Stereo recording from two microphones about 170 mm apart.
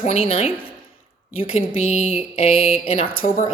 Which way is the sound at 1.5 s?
40° left (ahead or behind).